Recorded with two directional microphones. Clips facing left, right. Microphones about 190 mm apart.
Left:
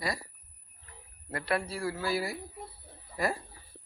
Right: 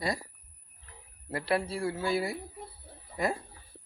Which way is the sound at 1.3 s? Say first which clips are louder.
Right 2 dB; 25° right (ahead or behind).